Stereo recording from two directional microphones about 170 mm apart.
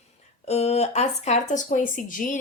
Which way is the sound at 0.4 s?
40° left (ahead or behind).